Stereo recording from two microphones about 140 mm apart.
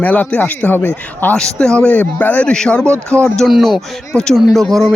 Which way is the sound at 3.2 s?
5° left (ahead or behind).